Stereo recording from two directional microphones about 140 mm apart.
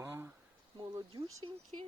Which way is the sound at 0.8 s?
25° right (ahead or behind).